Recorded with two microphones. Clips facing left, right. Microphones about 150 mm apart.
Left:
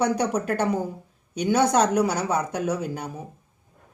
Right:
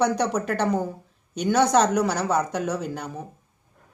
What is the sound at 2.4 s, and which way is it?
Speech, 10° left (ahead or behind).